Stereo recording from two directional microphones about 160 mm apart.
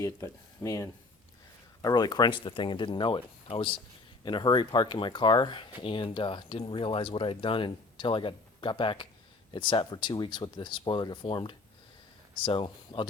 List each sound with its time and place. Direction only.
0.0 s speech: 20° left (ahead or behind)